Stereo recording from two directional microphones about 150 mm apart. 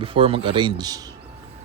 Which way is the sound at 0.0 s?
40° right (ahead or behind).